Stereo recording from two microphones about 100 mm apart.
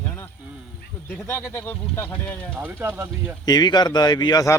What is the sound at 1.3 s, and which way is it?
Speech, 25° left (ahead or behind).